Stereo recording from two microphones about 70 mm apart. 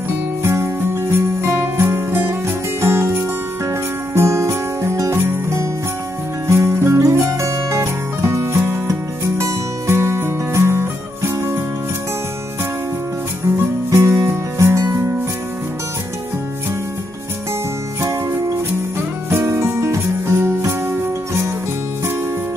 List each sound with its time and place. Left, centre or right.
0.4 s music: right
5.1 s jingle bell: right
6.4 s music: right
13.8 s music: right
18.0 s music: right